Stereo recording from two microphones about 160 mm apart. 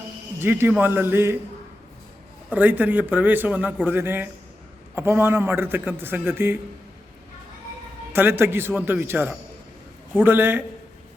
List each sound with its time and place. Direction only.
0.3 s a man's voice: 15° right (ahead or behind)
2.5 s a man's voice: 10° right (ahead or behind)
8.1 s a man's voice: 15° right (ahead or behind)